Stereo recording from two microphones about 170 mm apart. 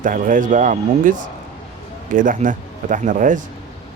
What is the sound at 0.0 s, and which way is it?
Speech, 50° right (ahead or behind).